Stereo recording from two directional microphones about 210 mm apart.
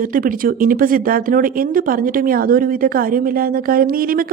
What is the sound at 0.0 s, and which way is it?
Speech, 40° right (ahead or behind).